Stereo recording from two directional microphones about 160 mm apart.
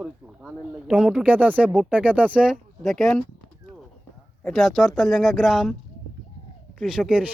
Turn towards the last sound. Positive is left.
turn(degrees=-5)  # may be behind; listen again after turning